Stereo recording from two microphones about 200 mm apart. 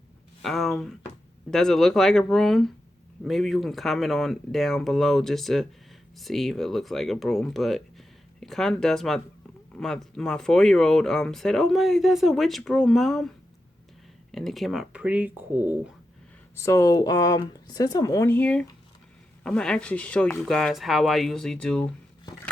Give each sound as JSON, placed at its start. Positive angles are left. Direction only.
{"t": 0.4, "sound": "speech", "side_deg": 0}
{"t": 14.3, "sound": "speech", "side_deg": 0}
{"t": 16.6, "sound": "speech", "side_deg": 15}